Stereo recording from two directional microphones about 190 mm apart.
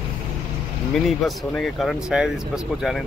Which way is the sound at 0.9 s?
Centre (ahead or behind).